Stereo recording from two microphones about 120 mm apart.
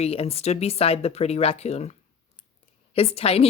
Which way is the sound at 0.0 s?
55° left (ahead or behind).